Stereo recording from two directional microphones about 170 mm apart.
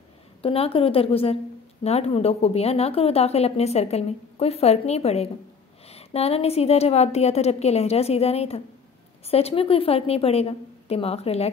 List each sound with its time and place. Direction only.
0.4 s a woman's voice: 35° left (ahead or behind)